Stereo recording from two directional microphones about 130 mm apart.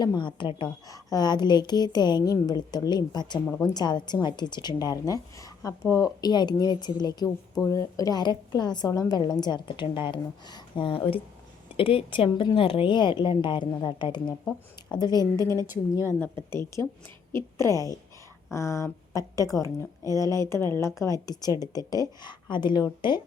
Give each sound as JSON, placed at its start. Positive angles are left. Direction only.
{"t": 0.0, "sound": "a woman's voice", "side_deg": 35}
{"t": 0.9, "sound": "a woman's voice", "side_deg": 25}
{"t": 12.3, "sound": "a woman's voice", "side_deg": 30}
{"t": 12.5, "sound": "a woman's voice", "side_deg": 45}
{"t": 15.6, "sound": "a woman's voice", "side_deg": -15}
{"t": 16.0, "sound": "a woman's voice", "side_deg": 15}